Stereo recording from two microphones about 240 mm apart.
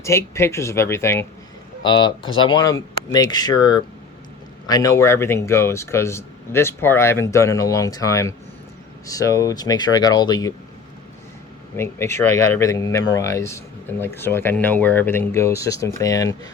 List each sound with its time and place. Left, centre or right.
0.0 s speech: centre
11.8 s speech: centre